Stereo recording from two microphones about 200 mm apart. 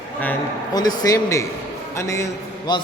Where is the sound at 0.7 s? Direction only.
20° left (ahead or behind).